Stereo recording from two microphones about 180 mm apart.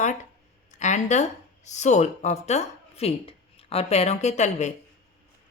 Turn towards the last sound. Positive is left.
turn(degrees=40)  # may be behind; listen again after turning